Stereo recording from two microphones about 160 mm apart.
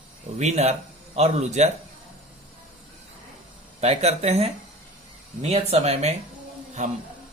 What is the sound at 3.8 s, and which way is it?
Speech, 40° right (ahead or behind).